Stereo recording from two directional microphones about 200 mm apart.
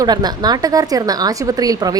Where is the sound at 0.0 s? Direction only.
20° right (ahead or behind).